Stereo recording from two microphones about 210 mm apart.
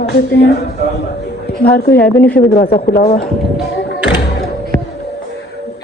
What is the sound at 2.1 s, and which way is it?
Speech, 5° left (ahead or behind).